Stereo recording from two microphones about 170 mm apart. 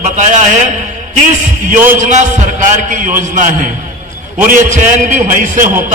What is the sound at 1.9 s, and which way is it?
A man's voice, 45° right (ahead or behind).